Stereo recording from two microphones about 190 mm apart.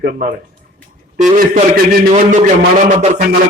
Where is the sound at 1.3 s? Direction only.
50° right (ahead or behind).